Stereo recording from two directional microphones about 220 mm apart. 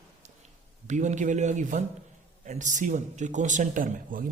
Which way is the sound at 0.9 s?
35° right (ahead or behind).